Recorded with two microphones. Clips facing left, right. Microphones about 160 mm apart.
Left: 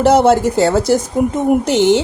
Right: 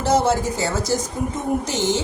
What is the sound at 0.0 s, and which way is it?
A woman's voice, 65° left (ahead or behind).